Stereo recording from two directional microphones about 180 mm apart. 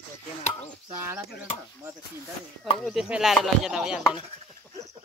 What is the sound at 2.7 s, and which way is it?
Chopping, centre (ahead or behind).